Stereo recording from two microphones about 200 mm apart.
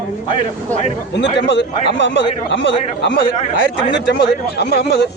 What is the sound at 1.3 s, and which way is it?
Speech, 60° left (ahead or behind).